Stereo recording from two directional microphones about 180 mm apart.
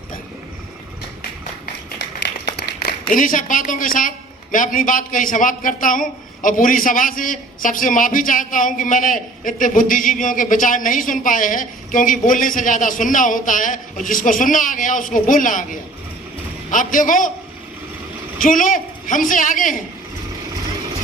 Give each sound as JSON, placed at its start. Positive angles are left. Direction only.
{"t": 2.1, "sound": "a sound", "side_deg": 70}
{"t": 3.1, "sound": "a man's voice", "side_deg": 50}
{"t": 16.7, "sound": "a man's voice", "side_deg": 50}
{"t": 18.4, "sound": "a man's voice", "side_deg": 50}